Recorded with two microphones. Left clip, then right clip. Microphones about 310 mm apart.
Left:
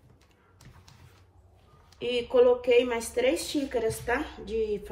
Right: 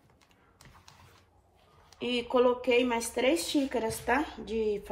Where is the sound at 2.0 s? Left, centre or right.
Centre.